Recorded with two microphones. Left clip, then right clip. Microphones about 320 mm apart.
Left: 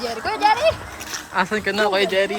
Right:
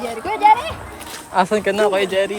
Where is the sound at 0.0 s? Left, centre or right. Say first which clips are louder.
Right 4 dB; centre.